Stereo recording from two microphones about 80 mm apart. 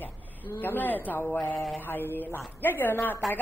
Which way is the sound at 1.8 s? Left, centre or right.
Left.